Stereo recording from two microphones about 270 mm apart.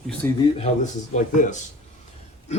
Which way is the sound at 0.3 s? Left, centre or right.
Left.